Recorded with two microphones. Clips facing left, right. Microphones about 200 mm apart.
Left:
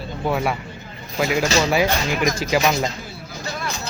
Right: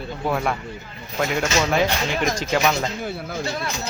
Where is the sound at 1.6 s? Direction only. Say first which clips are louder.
Even; 5° left (ahead or behind).